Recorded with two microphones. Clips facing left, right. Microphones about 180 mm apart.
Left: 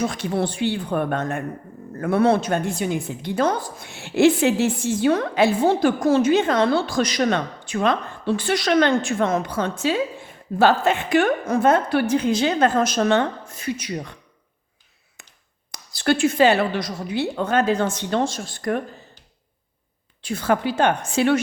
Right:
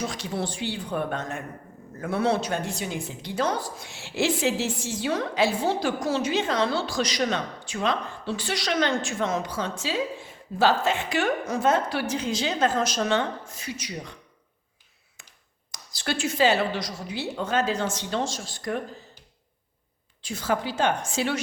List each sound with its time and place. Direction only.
0.0 s a woman's voice: 55° left (ahead or behind)
15.2 s tap: 55° left (ahead or behind)
15.7 s a woman's voice: 60° left (ahead or behind)
20.2 s a woman's voice: 60° left (ahead or behind)